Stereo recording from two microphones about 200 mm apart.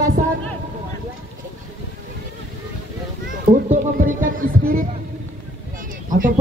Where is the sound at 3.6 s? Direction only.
40° right (ahead or behind).